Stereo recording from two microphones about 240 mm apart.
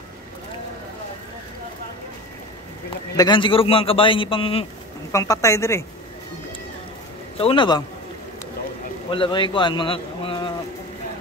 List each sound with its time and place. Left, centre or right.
3.2 s a man's voice: centre
7.3 s a man's voice: left
9.1 s a man's voice: left